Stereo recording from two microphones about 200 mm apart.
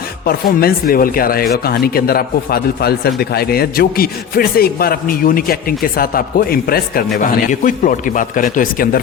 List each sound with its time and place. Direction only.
0.3 s speech: 50° left (ahead or behind)